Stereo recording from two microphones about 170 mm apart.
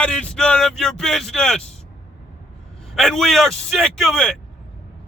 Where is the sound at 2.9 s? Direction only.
Centre (ahead or behind).